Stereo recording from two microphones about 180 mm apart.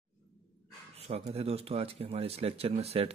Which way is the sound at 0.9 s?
35° right (ahead or behind).